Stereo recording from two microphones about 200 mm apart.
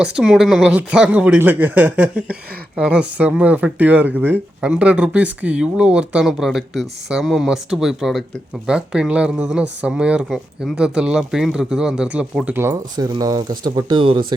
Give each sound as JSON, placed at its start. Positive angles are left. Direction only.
{"t": 0.0, "sound": "speech", "side_deg": 0}